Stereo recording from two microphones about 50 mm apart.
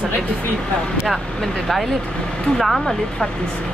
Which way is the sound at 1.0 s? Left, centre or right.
Centre.